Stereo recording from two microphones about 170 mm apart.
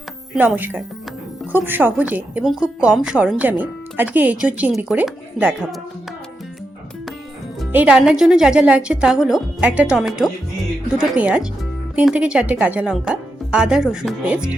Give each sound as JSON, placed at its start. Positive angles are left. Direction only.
{"t": 0.3, "sound": "a woman's voice", "side_deg": -10}
{"t": 7.7, "sound": "a woman's voice", "side_deg": -10}